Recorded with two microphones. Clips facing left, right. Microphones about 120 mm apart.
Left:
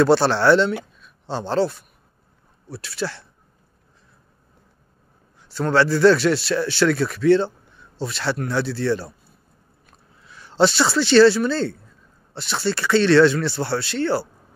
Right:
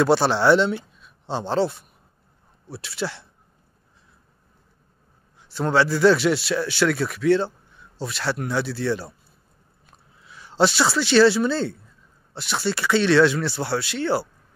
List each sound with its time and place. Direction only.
0.0 s a man's voice: 10° right (ahead or behind)
5.5 s a man's voice: 15° right (ahead or behind)
9.8 s a sound: 10° right (ahead or behind)
12.4 s a man's voice: 10° right (ahead or behind)